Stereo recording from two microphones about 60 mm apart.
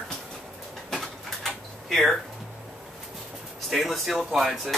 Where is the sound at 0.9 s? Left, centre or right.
Centre.